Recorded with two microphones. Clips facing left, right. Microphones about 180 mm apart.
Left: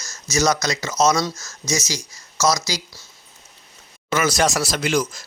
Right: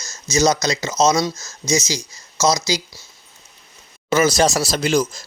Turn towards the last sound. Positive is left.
turn(degrees=-30)  # may be behind; listen again after turning